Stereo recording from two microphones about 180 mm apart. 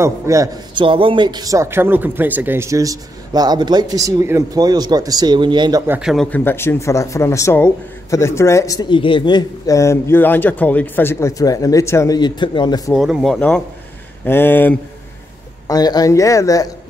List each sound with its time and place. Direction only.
0.0 s a man's voice: 20° right (ahead or behind)
0.8 s speech: 30° right (ahead or behind)
5.9 s speech: 5° right (ahead or behind)
6.3 s a man's voice: 10° left (ahead or behind)
12.9 s a man's voice: centre (ahead or behind)
15.6 s a man's voice: 20° left (ahead or behind)